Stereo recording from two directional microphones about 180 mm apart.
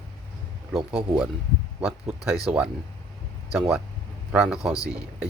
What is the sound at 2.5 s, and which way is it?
A man's voice, 10° right (ahead or behind).